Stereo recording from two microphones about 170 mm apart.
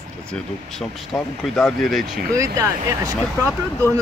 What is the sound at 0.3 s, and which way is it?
Speech, 5° left (ahead or behind).